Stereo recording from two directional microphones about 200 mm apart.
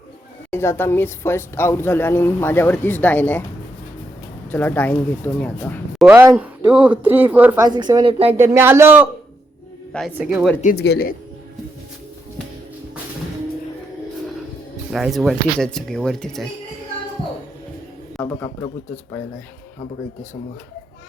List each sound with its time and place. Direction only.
0.5 s speech: 10° left (ahead or behind)
4.5 s speech: 10° left (ahead or behind)
6.1 s speech: 10° right (ahead or behind)
7.6 s speech: 20° right (ahead or behind)
8.5 s speech: 10° right (ahead or behind)
10.2 s speech: 5° right (ahead or behind)
10.8 s speech: 55° left (ahead or behind)
14.9 s speech: centre (ahead or behind)
18.2 s a man's voice: 10° left (ahead or behind)